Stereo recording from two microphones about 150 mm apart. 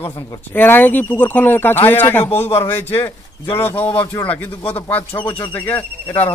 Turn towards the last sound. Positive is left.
turn(degrees=15)  # may be behind; listen again after turning